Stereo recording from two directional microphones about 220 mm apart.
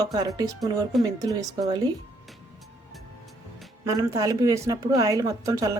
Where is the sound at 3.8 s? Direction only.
15° right (ahead or behind).